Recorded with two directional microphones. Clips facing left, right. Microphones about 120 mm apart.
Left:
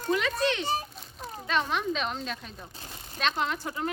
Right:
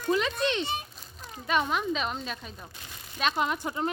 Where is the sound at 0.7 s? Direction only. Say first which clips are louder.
Left 4 dB; 35° left (ahead or behind).